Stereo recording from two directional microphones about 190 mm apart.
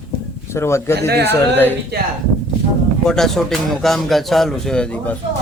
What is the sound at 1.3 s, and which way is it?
Speech, 10° left (ahead or behind).